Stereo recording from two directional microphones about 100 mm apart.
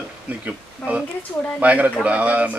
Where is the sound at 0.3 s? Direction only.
15° right (ahead or behind).